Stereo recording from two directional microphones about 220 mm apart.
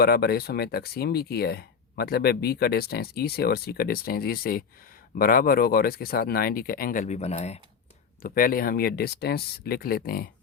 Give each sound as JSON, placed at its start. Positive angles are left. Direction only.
{"t": 0.0, "sound": "speech", "side_deg": 45}
{"t": 8.2, "sound": "speech", "side_deg": 40}